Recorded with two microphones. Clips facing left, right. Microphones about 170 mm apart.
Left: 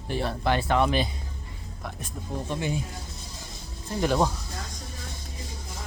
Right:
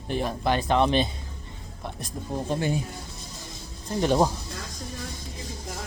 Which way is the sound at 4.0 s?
25° right (ahead or behind).